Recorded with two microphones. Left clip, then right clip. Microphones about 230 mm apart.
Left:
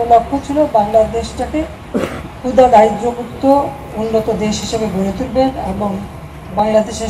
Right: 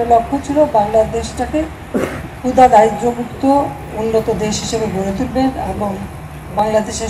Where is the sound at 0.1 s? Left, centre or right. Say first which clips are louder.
Left 2 dB; right.